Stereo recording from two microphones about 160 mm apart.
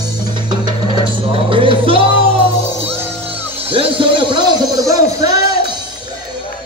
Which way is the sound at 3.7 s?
30° right (ahead or behind).